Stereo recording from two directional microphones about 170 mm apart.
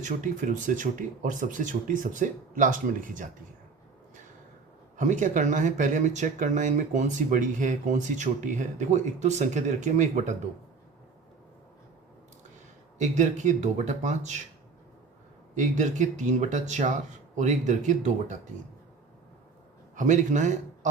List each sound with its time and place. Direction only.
0.0 s speech: 50° right (ahead or behind)
4.9 s speech: 50° right (ahead or behind)
13.0 s speech: 45° right (ahead or behind)
15.5 s speech: 45° right (ahead or behind)
20.0 s speech: 45° right (ahead or behind)